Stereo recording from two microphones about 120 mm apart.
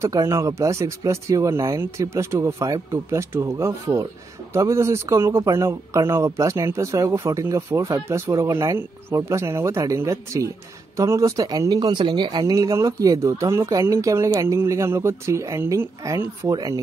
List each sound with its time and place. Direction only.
0.0 s speech: 25° right (ahead or behind)